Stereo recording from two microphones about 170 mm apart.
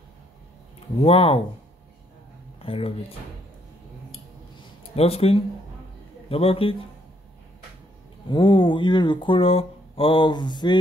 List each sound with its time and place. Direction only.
1.0 s a man's voice: 35° left (ahead or behind)
2.6 s speech: 35° left (ahead or behind)
4.9 s a man's voice: 35° left (ahead or behind)
8.3 s speech: 30° left (ahead or behind)